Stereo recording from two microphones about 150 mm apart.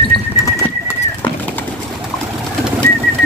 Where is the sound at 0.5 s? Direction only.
20° left (ahead or behind).